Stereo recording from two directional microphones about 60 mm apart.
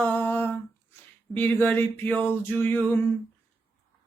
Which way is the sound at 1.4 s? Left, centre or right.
Left.